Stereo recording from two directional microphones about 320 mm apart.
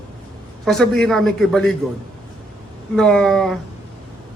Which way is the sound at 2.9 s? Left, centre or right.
Centre.